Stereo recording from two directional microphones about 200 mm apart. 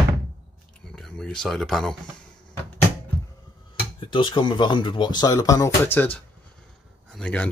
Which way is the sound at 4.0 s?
25° left (ahead or behind).